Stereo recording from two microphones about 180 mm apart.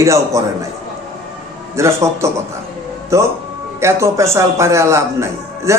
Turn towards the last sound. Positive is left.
turn(degrees=-15)  # may be behind; listen again after turning